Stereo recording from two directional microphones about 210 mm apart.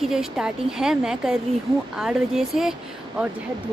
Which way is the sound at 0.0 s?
Centre (ahead or behind).